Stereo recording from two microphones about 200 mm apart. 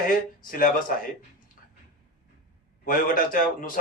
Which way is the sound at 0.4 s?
45° left (ahead or behind).